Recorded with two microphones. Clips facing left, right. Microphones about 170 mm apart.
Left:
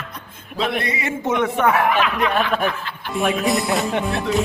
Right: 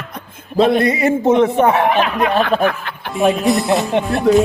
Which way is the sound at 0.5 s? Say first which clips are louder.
Right 10 dB; 35° right (ahead or behind).